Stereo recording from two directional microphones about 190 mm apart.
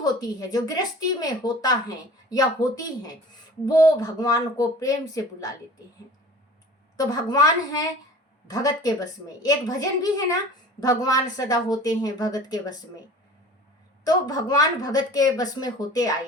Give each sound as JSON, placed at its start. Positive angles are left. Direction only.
{"t": 0.0, "sound": "a woman's voice", "side_deg": 20}
{"t": 6.9, "sound": "a woman's voice", "side_deg": 20}
{"t": 14.0, "sound": "a woman's voice", "side_deg": 20}